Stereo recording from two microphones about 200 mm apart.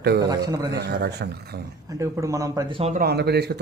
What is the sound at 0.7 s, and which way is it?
Speech, 55° right (ahead or behind).